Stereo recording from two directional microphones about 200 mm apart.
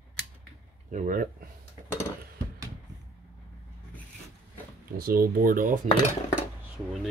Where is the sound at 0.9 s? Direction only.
40° right (ahead or behind).